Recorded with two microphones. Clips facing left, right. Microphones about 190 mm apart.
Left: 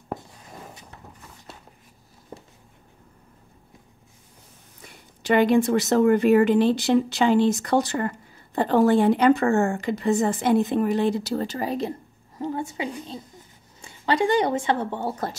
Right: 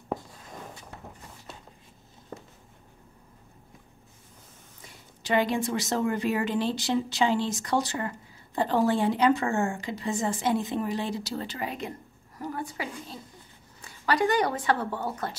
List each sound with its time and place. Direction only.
0.1 s a sound: 5° left (ahead or behind)
5.2 s speech: 60° left (ahead or behind); by 11.9 s 35° left (ahead or behind)
12.4 s a woman's voice: 25° left (ahead or behind)